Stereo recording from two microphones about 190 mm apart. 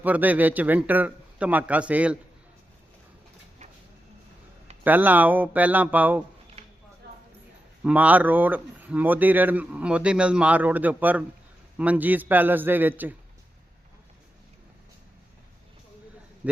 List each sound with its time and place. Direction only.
0.0 s speech: 10° right (ahead or behind)
4.8 s speech: 10° right (ahead or behind)
6.6 s a sound: 30° right (ahead or behind)
7.9 s speech: 10° right (ahead or behind)